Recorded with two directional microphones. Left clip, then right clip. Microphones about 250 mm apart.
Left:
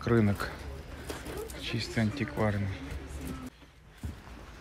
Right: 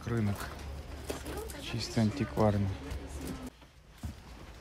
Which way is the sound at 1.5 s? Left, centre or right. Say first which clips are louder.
Left 2 dB; centre.